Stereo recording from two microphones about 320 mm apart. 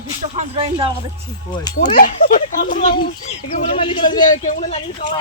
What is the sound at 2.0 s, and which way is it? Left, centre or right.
Speech, left.